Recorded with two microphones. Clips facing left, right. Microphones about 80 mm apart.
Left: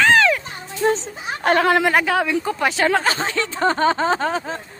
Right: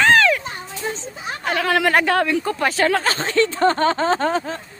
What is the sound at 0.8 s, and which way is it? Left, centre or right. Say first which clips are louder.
Speech: left 9 dB; left.